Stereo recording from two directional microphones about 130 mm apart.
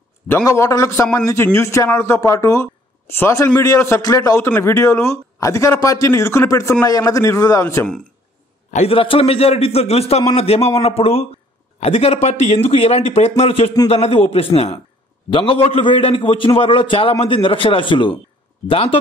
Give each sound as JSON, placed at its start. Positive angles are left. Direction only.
{"t": 0.5, "sound": "a man's voice", "side_deg": 25}
{"t": 8.7, "sound": "a man's voice", "side_deg": 45}